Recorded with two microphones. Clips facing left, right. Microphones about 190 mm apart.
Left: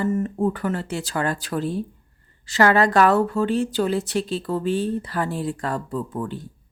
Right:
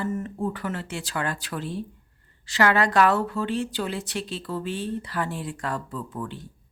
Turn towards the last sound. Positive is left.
turn(degrees=40)  # may be behind; listen again after turning